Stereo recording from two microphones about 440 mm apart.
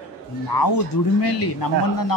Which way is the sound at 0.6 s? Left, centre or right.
Left.